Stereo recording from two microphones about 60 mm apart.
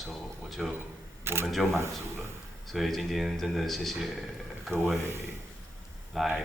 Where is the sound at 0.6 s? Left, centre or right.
Centre.